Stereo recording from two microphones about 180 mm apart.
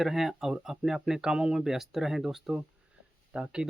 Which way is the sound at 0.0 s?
Centre (ahead or behind).